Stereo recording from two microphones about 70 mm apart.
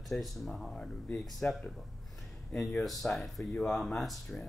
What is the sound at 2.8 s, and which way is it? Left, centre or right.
Speech, centre.